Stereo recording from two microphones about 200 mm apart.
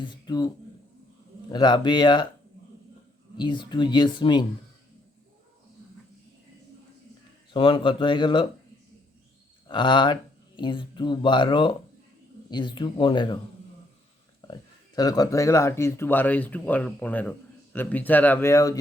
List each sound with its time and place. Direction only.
0.0 s speech: 20° left (ahead or behind)
3.3 s speech: 25° left (ahead or behind)
7.5 s speech: 25° left (ahead or behind)
9.6 s speech: 25° left (ahead or behind)
14.4 s speech: 20° left (ahead or behind)